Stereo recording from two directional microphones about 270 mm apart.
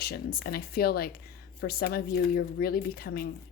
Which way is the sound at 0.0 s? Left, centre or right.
Left.